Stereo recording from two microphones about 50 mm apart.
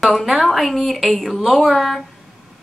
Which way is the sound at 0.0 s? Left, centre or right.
Centre.